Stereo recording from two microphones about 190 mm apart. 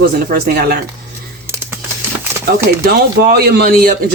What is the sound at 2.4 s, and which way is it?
Speech, 55° right (ahead or behind).